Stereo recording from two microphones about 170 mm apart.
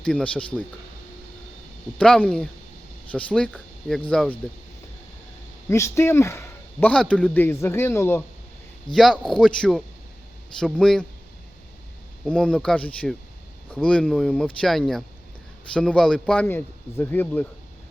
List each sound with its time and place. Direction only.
0.0 s a man's voice: 5° left (ahead or behind)
2.0 s a man's voice: 5° left (ahead or behind)
5.6 s a man's voice: 15° left (ahead or behind)
8.9 s speech: centre (ahead or behind)
12.2 s a man's voice: 5° left (ahead or behind)